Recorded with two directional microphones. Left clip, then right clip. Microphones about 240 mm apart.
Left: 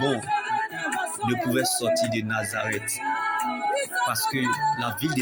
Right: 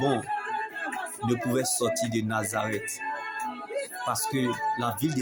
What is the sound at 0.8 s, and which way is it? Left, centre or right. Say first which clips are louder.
Music: left 6 dB; left.